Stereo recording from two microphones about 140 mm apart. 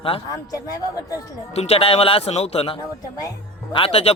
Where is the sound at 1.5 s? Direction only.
45° left (ahead or behind).